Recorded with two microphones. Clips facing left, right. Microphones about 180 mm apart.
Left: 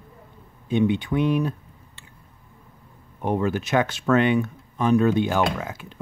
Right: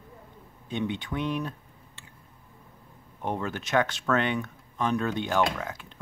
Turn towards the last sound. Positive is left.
turn(degrees=10)  # may be behind; listen again after turning